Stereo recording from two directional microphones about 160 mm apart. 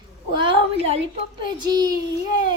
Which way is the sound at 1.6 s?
25° right (ahead or behind).